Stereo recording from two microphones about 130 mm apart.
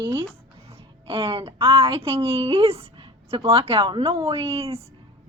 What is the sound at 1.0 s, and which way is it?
A woman's voice, 45° right (ahead or behind).